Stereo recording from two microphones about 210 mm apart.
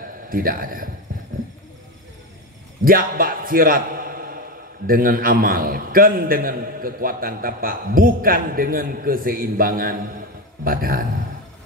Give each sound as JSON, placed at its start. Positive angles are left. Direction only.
{"t": 0.3, "sound": "a man's voice", "side_deg": -40}
{"t": 2.8, "sound": "a man's voice", "side_deg": -40}